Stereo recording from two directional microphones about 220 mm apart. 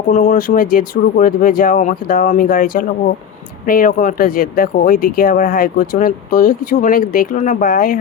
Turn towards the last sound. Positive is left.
turn(degrees=40)  # may be behind; listen again after turning